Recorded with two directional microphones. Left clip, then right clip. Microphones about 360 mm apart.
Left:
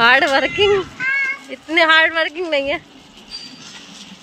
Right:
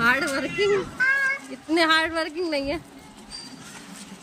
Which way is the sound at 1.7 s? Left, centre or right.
Centre.